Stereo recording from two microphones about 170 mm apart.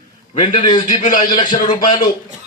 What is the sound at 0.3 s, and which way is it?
A man's voice, 30° left (ahead or behind).